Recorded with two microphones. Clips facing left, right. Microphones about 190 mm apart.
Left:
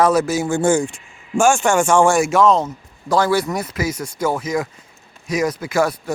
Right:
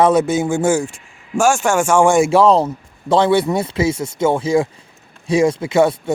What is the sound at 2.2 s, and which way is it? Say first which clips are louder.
Speech: right 3 dB; 30° right (ahead or behind).